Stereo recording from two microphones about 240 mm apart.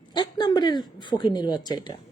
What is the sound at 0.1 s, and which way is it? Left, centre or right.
A woman's voice, centre.